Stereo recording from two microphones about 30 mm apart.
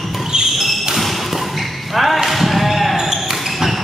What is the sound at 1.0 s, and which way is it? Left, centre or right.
Thump, centre.